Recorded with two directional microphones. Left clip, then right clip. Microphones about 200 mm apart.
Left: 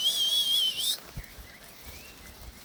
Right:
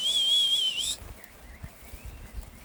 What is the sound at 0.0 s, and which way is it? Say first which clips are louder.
Whistle: right 2 dB; 10° right (ahead or behind).